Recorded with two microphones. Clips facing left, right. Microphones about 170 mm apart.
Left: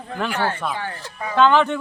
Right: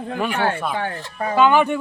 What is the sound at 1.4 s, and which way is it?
Speech, 10° right (ahead or behind).